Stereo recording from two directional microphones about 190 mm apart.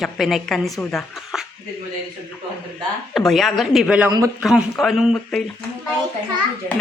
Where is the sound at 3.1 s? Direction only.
Centre (ahead or behind).